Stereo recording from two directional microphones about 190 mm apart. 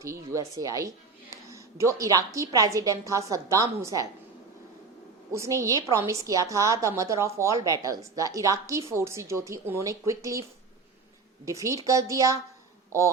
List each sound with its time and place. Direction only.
0.0 s a woman's voice: 15° right (ahead or behind)
5.3 s a woman's voice: 15° right (ahead or behind)
11.4 s a woman's voice: 15° right (ahead or behind)